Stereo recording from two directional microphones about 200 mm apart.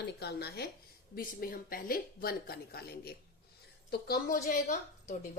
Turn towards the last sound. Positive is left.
turn(degrees=40)  # may be behind; listen again after turning